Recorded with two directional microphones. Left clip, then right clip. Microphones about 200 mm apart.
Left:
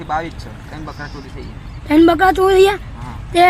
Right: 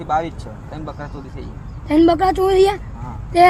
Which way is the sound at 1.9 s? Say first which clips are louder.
Left 3 dB; 40° left (ahead or behind).